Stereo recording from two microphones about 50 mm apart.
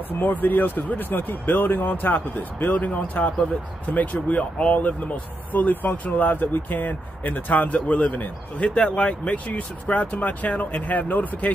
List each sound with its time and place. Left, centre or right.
0.2 s speech: left